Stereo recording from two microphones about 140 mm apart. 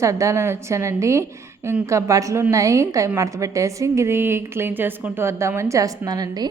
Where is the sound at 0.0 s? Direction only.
20° right (ahead or behind).